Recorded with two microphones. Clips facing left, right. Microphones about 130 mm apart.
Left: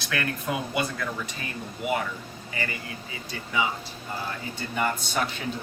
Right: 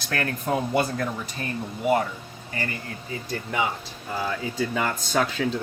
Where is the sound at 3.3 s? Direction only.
55° right (ahead or behind).